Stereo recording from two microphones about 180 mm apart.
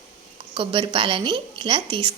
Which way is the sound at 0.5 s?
30° right (ahead or behind).